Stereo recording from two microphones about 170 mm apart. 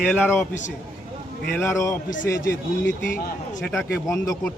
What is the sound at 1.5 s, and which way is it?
Speech, 15° left (ahead or behind).